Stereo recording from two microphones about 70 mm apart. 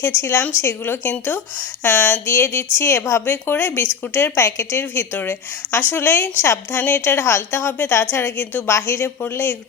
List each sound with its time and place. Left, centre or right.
0.0 s a woman's voice: left; by 2.2 s centre
2.2 s speech: left
3.2 s a woman's voice: left
8.6 s speech: left